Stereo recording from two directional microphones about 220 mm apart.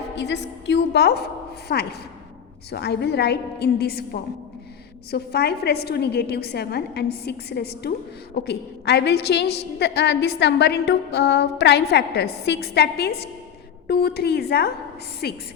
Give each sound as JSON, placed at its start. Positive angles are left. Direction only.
{"t": 0.2, "sound": "a woman's voice", "side_deg": 50}